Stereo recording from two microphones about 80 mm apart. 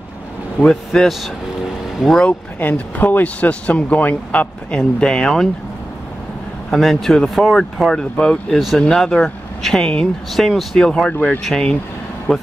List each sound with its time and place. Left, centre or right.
0.6 s speech: centre
2.2 s speech: left; by 5.5 s centre
6.7 s speech: centre
8.0 s speech: centre